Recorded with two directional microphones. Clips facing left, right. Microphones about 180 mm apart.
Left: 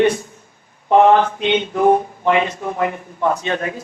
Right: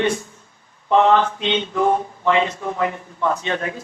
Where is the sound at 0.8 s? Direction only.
15° left (ahead or behind).